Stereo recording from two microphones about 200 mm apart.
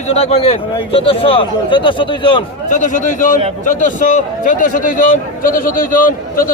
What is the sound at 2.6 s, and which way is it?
A man's voice, 40° left (ahead or behind).